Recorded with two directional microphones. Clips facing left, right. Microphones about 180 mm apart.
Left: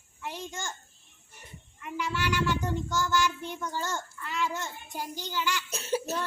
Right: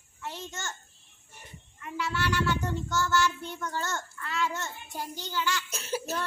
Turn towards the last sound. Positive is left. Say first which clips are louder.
# left 3 dB
turn(degrees=35)  # may be behind; listen again after turning